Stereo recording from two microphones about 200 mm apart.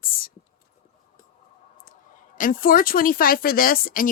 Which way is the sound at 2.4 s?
45° left (ahead or behind).